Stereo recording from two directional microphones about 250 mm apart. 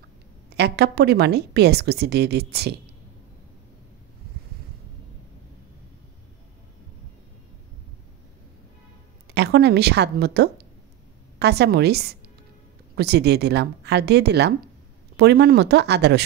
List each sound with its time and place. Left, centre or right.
0.6 s a woman's voice: right
9.3 s a woman's voice: right